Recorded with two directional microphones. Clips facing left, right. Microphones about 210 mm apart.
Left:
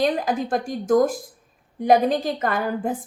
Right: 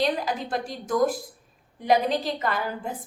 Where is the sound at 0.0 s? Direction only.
45° left (ahead or behind).